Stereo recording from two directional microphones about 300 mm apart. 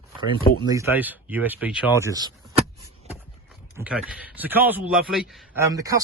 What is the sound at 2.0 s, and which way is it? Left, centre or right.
Power windows, centre.